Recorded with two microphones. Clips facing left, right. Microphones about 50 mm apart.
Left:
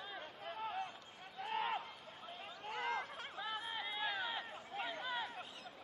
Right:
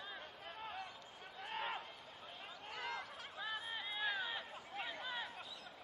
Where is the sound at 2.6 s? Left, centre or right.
Left.